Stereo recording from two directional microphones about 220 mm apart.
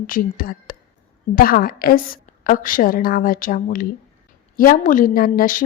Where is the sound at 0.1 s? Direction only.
40° left (ahead or behind).